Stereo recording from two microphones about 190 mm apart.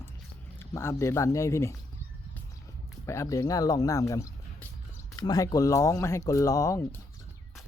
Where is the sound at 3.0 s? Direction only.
15° left (ahead or behind).